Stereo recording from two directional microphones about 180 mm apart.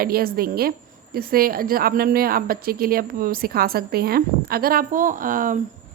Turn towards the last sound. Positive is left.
turn(degrees=-50)  # may be behind; listen again after turning